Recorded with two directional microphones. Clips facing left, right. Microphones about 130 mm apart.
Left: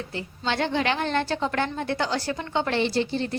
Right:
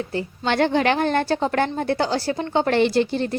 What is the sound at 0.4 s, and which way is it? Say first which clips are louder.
A woman's voice: right 6 dB; 55° right (ahead or behind).